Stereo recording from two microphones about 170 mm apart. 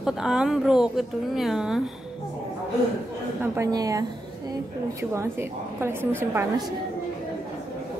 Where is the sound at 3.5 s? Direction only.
20° right (ahead or behind).